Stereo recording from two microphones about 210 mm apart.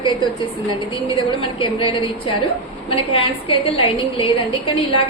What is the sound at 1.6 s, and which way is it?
A woman's voice, 25° left (ahead or behind).